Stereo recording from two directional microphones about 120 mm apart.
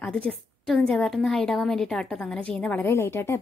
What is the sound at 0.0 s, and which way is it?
A woman's voice, 10° left (ahead or behind).